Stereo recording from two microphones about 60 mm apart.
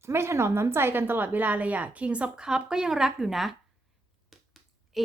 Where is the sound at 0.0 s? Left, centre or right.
Right.